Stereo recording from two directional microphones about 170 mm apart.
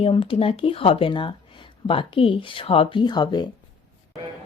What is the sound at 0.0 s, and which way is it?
Speech, 30° left (ahead or behind).